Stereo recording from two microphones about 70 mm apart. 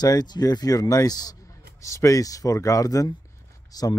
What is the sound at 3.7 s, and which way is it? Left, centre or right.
Speech, left.